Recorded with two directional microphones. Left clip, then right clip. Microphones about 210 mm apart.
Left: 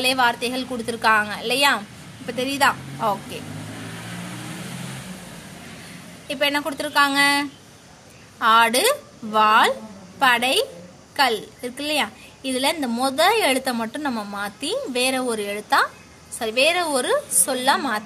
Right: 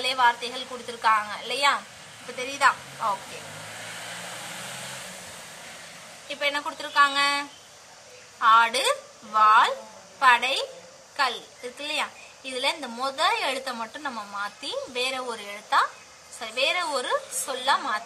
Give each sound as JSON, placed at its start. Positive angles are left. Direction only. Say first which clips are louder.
{"t": 0.0, "sound": "a woman's voice", "louder": "left 3 dB", "side_deg": 50}
{"t": 6.2, "sound": "a woman's voice", "louder": "left 5 dB", "side_deg": 50}
{"t": 11.8, "sound": "a woman's voice", "louder": "left 6 dB", "side_deg": 50}